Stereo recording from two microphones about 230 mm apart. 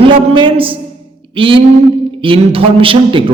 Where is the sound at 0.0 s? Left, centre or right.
Right.